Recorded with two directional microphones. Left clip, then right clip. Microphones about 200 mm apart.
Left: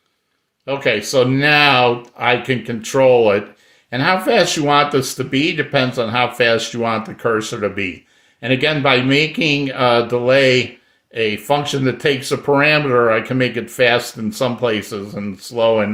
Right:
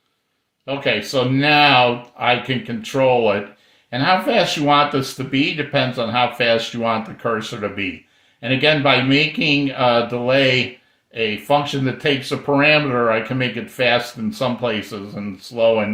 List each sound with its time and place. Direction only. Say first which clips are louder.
0.6 s speech: left 3 dB; 45° left (ahead or behind)